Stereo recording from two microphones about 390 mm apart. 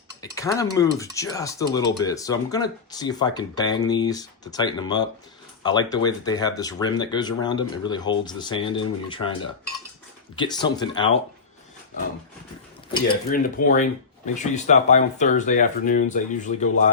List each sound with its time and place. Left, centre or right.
0.2 s speech: centre
10.3 s speech: centre
12.9 s speech: centre